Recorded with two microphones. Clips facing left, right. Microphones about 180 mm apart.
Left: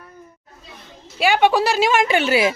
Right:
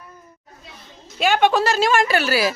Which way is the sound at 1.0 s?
10° left (ahead or behind).